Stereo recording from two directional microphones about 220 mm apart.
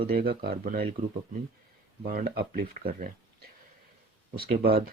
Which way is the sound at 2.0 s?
40° right (ahead or behind).